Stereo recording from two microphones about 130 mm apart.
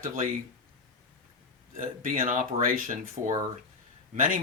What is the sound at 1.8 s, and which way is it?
Speech, 90° right.